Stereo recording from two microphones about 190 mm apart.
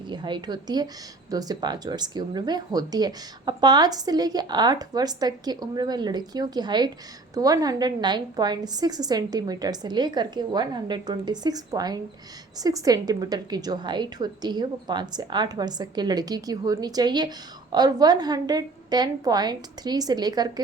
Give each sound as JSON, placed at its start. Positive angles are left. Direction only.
{"t": 0.1, "sound": "a woman's voice", "side_deg": -25}